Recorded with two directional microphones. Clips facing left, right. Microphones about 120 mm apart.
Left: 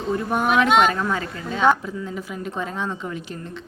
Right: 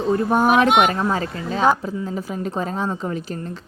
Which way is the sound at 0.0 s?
35° right (ahead or behind).